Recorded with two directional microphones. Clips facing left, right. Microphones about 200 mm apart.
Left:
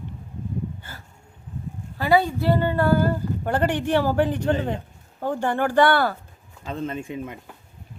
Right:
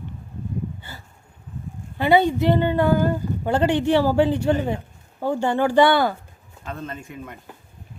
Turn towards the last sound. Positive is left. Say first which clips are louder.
# left 5 dB
turn(degrees=15)  # may be behind; listen again after turning